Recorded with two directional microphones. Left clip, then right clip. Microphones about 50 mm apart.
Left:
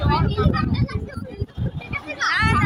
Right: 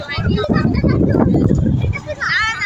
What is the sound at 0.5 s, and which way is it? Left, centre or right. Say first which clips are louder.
Vehicle: right 8 dB; right.